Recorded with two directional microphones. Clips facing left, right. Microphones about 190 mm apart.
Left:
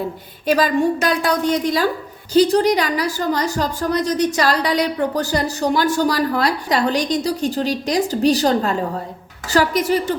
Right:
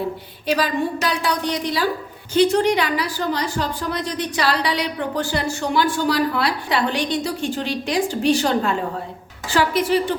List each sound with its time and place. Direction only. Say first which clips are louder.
0.4 s a woman's voice: left 5 dB; 45° left (ahead or behind)